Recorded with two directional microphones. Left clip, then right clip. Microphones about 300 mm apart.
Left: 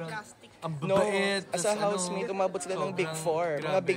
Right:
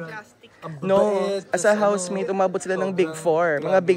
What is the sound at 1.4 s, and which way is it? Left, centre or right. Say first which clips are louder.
A man's voice: right 9 dB; right.